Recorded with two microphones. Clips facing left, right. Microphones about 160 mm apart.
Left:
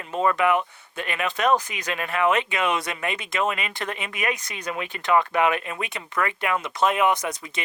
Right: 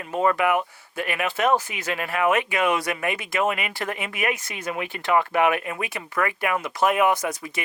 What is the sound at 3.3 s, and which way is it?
Speech, 20° right (ahead or behind).